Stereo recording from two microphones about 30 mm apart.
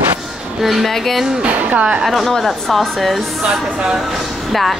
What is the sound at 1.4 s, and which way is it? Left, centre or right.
Speech, right.